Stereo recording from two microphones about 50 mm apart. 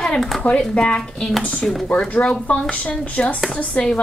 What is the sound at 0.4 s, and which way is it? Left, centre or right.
Speech, left.